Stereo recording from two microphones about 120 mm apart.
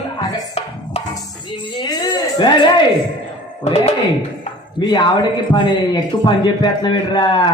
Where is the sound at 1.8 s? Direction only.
35° left (ahead or behind).